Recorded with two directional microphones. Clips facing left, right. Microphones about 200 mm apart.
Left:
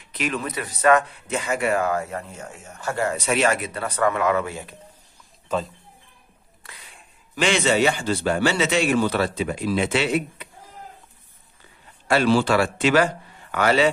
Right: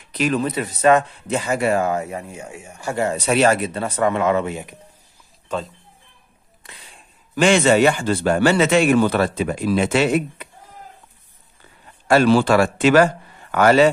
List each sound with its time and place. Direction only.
0.1 s speech: 35° right (ahead or behind); by 3.2 s 20° right (ahead or behind)
3.3 s speech: 35° right (ahead or behind); by 4.7 s 20° right (ahead or behind)
6.6 s a sound: 15° right (ahead or behind)
7.3 s speech: 50° right (ahead or behind)
12.1 s speech: 50° right (ahead or behind)